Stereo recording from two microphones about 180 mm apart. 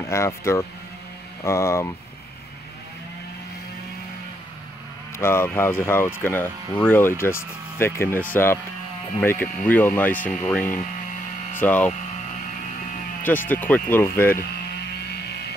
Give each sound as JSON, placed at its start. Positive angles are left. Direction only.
{"t": 0.1, "sound": "speech", "side_deg": 15}
{"t": 5.2, "sound": "speech", "side_deg": 15}
{"t": 11.5, "sound": "hum", "side_deg": 10}
{"t": 13.2, "sound": "speech", "side_deg": 10}